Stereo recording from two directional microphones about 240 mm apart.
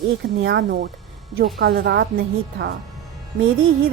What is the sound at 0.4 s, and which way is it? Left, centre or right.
A woman's voice, right.